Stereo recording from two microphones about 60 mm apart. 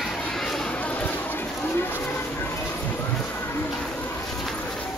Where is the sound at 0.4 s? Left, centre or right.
Centre.